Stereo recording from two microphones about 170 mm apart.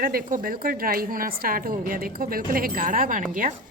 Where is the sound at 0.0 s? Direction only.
55° right (ahead or behind).